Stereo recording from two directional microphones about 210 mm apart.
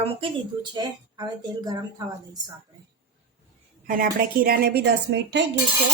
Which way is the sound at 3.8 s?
40° right (ahead or behind).